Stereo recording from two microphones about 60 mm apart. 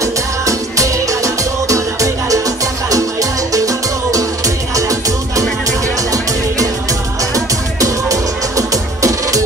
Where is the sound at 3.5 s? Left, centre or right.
Right.